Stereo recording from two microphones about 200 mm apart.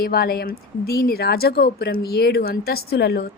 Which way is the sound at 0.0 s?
50° left (ahead or behind).